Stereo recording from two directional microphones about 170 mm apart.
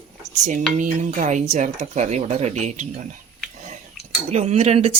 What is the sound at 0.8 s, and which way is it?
Speech, 50° right (ahead or behind).